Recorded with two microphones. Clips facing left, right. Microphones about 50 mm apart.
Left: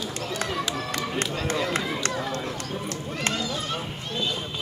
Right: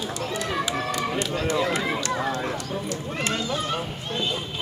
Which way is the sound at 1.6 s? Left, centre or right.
Right.